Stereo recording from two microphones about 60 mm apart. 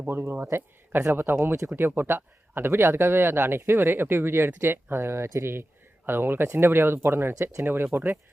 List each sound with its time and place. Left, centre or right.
1.1 s speech: right